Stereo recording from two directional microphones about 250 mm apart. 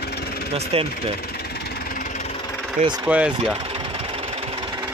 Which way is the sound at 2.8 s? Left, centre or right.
Right.